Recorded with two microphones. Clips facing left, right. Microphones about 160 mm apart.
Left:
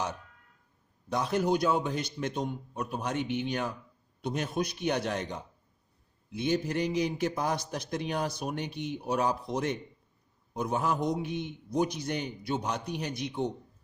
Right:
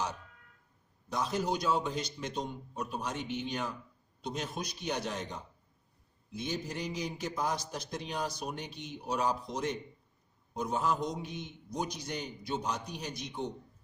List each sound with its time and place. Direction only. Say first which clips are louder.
1.1 s a man's voice: left 5 dB; 60° left (ahead or behind)